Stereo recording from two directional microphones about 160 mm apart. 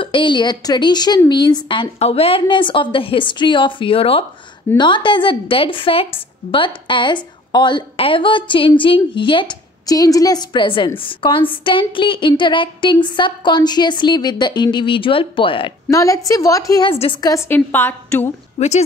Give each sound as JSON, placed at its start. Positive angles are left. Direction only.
{"t": 0.0, "sound": "a woman's voice", "side_deg": 30}
{"t": 15.9, "sound": "speech", "side_deg": 20}
{"t": 16.9, "sound": "a woman's voice", "side_deg": 35}
{"t": 17.2, "sound": "a woman's voice", "side_deg": 20}
{"t": 18.6, "sound": "a woman's voice", "side_deg": 40}